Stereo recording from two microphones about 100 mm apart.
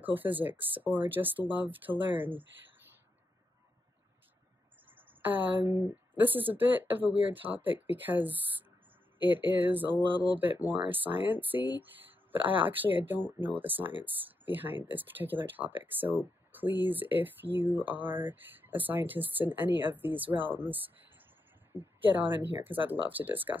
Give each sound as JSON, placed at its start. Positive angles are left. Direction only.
{"t": 0.0, "sound": "speech", "side_deg": -20}
{"t": 4.8, "sound": "a sound", "side_deg": -20}
{"t": 5.7, "sound": "speech", "side_deg": -25}